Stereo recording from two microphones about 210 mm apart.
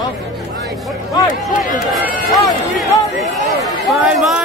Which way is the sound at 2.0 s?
Centre (ahead or behind).